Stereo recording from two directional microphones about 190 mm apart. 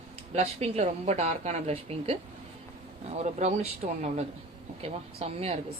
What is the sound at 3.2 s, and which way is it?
Speech, 35° right (ahead or behind).